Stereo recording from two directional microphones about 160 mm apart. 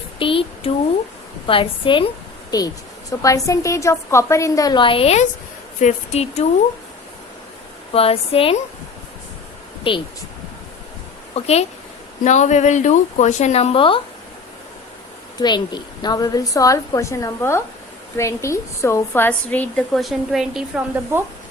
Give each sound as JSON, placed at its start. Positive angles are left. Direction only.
{"t": 0.2, "sound": "a woman's voice", "side_deg": 35}
{"t": 7.9, "sound": "a woman's voice", "side_deg": 35}
{"t": 9.9, "sound": "a woman's voice", "side_deg": 35}
{"t": 11.3, "sound": "a woman's voice", "side_deg": 40}
{"t": 15.4, "sound": "a woman's voice", "side_deg": 25}